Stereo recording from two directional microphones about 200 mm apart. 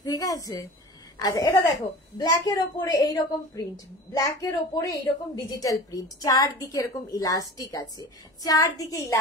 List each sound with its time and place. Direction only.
0.0 s a woman's voice: 20° left (ahead or behind)